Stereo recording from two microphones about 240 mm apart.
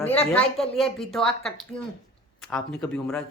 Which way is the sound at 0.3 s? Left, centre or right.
Centre.